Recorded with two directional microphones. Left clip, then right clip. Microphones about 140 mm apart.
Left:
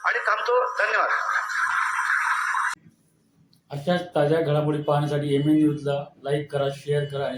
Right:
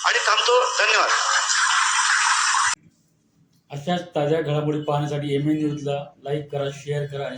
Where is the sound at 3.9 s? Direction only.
10° left (ahead or behind).